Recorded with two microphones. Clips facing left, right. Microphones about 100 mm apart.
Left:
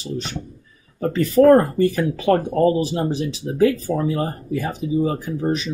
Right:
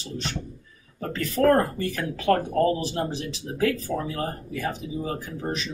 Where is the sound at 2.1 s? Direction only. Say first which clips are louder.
Left 4 dB; 15° left (ahead or behind).